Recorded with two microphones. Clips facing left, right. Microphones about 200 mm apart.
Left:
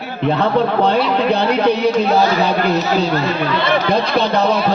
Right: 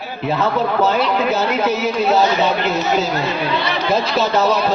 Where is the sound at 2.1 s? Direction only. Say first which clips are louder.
Left 1 dB; 20° right (ahead or behind).